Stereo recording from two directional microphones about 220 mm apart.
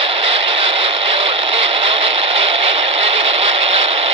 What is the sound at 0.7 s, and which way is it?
Radio, 25° right (ahead or behind).